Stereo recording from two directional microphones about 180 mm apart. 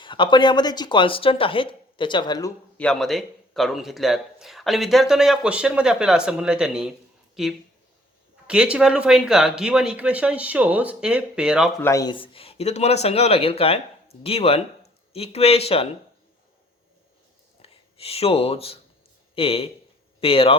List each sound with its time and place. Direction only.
0.0 s speech: 25° left (ahead or behind)
2.7 s speech: 5° left (ahead or behind)
11.8 s a man's voice: 15° left (ahead or behind); by 15.9 s 35° left (ahead or behind)
17.6 s a man's voice: 35° left (ahead or behind)